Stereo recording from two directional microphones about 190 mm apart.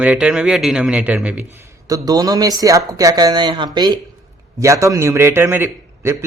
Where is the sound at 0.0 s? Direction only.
5° right (ahead or behind).